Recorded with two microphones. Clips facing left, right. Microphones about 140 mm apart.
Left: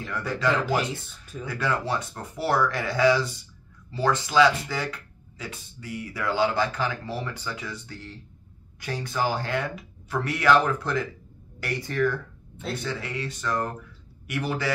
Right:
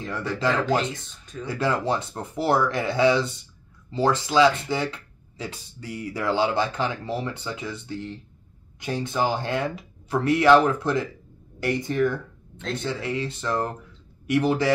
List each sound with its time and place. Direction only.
0.0 s speech: 30° right (ahead or behind)
1.5 s speech: 25° right (ahead or behind)